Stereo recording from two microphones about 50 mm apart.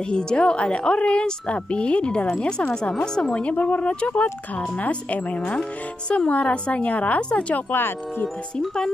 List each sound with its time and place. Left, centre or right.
0.1 s a woman's voice: centre
3.4 s a woman's voice: left
7.7 s wind chime: left
8.5 s speech: centre